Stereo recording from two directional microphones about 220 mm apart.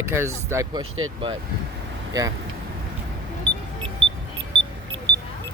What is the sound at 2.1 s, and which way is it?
Speech, 15° right (ahead or behind).